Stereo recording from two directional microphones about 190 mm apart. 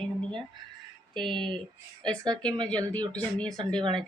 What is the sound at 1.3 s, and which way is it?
Speech, 25° right (ahead or behind).